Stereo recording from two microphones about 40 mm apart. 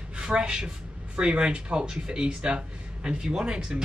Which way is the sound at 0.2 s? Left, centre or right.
Centre.